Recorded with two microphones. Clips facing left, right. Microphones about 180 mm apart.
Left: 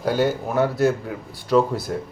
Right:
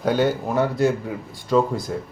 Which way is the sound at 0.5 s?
Centre (ahead or behind).